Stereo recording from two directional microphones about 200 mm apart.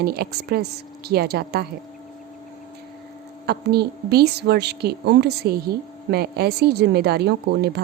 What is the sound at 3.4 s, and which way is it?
A woman's voice, 55° right (ahead or behind).